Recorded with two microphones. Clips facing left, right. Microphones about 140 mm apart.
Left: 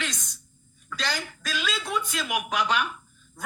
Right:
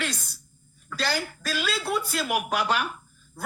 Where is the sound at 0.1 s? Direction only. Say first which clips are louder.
Right 4 dB; 10° right (ahead or behind).